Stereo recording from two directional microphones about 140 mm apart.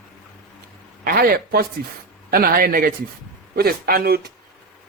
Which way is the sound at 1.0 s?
90° right.